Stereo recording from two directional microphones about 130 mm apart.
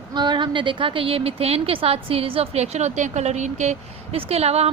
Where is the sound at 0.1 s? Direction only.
35° right (ahead or behind).